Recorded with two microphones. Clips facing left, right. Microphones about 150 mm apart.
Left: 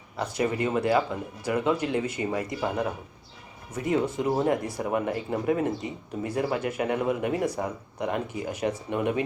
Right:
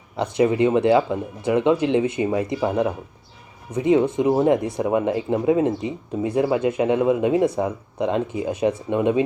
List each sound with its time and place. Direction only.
0.4 s speech: 20° right (ahead or behind)